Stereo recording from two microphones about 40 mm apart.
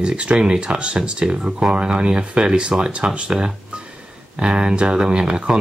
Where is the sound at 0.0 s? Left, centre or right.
Right.